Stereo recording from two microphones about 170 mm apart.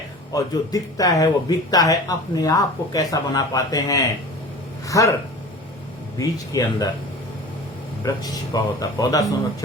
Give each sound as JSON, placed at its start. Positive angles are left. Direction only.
{"t": 0.3, "sound": "speech", "side_deg": 20}
{"t": 6.1, "sound": "speech", "side_deg": 20}
{"t": 8.0, "sound": "speech", "side_deg": 20}